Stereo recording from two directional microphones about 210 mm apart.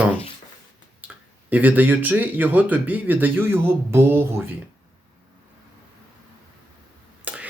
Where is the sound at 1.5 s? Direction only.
10° right (ahead or behind).